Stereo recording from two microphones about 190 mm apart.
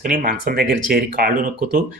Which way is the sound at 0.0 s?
50° right (ahead or behind).